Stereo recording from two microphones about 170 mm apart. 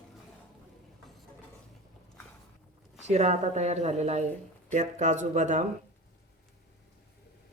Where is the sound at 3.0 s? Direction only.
40° right (ahead or behind).